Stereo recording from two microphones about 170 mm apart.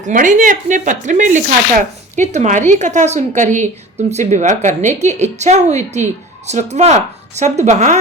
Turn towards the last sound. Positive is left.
turn(degrees=-45)  # may be behind; listen again after turning